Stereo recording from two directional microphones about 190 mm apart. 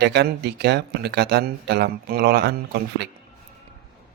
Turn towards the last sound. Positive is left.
turn(degrees=-60)  # may be behind; listen again after turning